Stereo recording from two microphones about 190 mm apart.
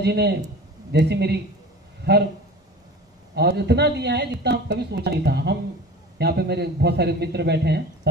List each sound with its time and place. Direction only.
0.0 s speech: 60° right (ahead or behind)
3.3 s speech: 60° right (ahead or behind)